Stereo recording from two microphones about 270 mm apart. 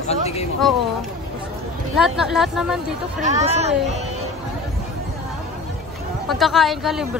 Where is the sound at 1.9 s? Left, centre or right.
Centre.